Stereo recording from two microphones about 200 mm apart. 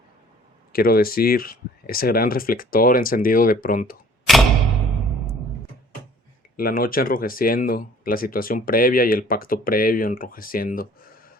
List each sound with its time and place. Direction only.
0.7 s speech: 50° left (ahead or behind)
6.6 s speech: 45° left (ahead or behind)